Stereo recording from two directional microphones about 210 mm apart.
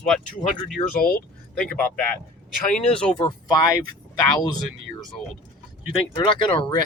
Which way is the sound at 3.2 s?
20° left (ahead or behind).